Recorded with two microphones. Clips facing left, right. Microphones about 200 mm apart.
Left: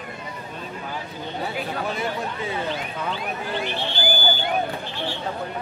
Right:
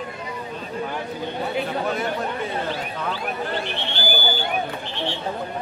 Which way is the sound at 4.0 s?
20° left (ahead or behind).